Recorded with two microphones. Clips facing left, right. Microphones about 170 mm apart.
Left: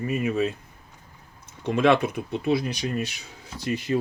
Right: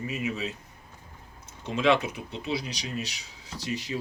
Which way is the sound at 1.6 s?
55° left (ahead or behind).